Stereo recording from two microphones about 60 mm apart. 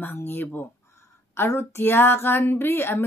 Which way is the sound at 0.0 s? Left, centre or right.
Left.